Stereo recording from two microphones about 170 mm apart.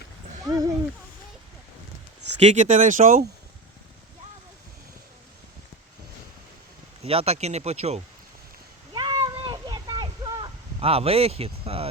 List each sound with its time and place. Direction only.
0.4 s speech: 20° right (ahead or behind)
2.4 s speech: 45° right (ahead or behind)
7.0 s speech: 35° right (ahead or behind)
8.9 s a sound: 25° right (ahead or behind)